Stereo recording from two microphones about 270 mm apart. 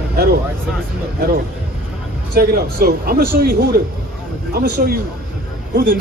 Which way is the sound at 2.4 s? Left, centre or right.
Right.